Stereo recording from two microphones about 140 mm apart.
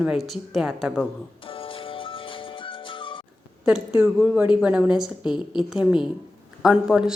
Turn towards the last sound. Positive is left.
turn(degrees=-5)  # may be behind; listen again after turning